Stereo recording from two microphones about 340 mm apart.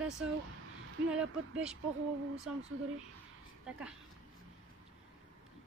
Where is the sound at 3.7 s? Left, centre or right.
Centre.